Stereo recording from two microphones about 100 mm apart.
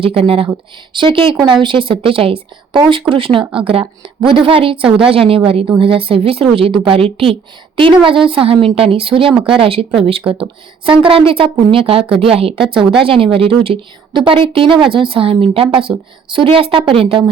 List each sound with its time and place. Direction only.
0.0 s a woman's voice: 65° right (ahead or behind)
12.7 s a woman's voice: 60° right (ahead or behind)